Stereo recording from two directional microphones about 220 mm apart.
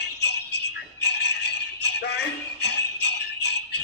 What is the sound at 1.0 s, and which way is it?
Music, 50° left (ahead or behind).